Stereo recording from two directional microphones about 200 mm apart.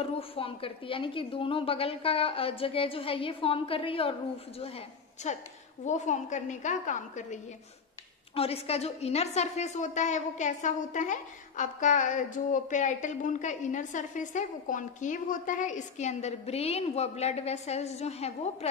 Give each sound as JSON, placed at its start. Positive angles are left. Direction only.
{"t": 0.0, "sound": "a woman's voice", "side_deg": 30}
{"t": 8.4, "sound": "a woman's voice", "side_deg": 30}